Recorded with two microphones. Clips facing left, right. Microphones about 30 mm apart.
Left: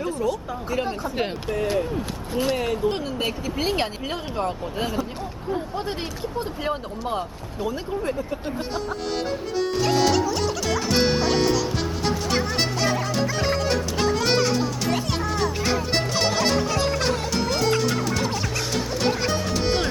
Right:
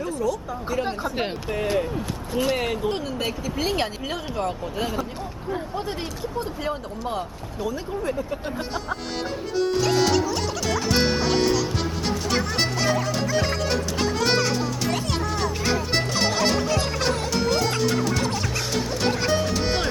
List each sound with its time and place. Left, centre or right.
0.0 s a sound: left
1.6 s speech: centre
2.8 s speech: centre
3.2 s speech: centre
9.7 s music: centre